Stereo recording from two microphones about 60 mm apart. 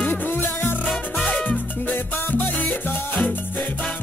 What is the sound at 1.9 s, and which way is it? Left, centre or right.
Music, left.